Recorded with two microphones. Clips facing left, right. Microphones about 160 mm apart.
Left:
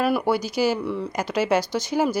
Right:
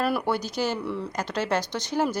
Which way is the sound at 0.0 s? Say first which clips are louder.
Left 4 dB; centre (ahead or behind).